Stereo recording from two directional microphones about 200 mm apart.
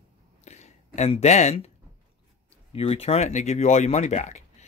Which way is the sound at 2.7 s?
30° left (ahead or behind).